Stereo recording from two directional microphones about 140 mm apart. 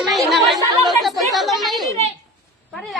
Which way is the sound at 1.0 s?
Centre (ahead or behind).